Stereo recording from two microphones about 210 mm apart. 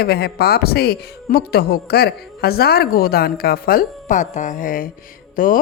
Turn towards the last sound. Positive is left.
turn(degrees=40)  # may be behind; listen again after turning